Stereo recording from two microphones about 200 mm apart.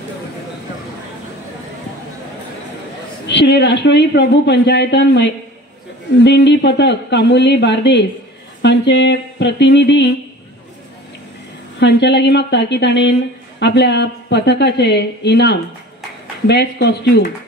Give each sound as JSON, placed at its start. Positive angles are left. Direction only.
{"t": 3.3, "sound": "a woman's voice", "side_deg": 60}
{"t": 11.8, "sound": "a woman's voice", "side_deg": 60}